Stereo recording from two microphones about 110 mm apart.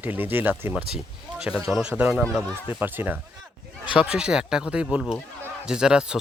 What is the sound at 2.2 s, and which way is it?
Speech, 10° left (ahead or behind).